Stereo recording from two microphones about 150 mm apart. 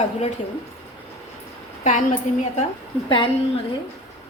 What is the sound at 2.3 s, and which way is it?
Speech, 55° left (ahead or behind).